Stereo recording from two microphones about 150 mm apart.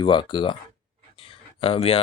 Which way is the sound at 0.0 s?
30° left (ahead or behind).